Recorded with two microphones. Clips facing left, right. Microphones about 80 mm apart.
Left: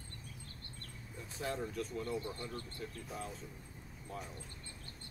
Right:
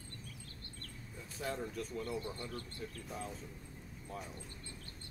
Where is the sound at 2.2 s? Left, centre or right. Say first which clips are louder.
Even; left.